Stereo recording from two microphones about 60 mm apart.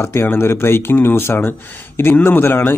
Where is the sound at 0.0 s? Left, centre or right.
Left.